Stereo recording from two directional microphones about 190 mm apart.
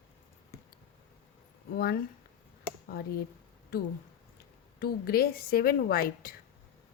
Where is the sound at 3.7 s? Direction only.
55° left (ahead or behind).